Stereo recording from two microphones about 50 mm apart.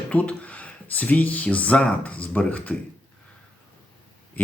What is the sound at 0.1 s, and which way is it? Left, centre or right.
Speech, left.